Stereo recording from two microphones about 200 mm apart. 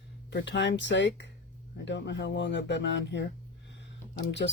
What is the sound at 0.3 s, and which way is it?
Speech, 60° left (ahead or behind).